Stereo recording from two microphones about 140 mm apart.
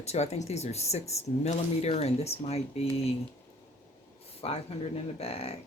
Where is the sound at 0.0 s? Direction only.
50° left (ahead or behind).